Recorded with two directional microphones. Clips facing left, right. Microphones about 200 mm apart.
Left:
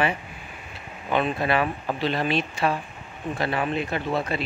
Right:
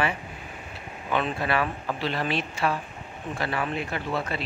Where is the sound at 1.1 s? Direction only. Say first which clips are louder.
Left 3 dB; 20° left (ahead or behind).